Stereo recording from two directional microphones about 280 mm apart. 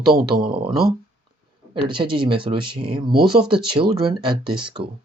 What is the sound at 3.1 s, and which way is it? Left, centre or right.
Speech, right.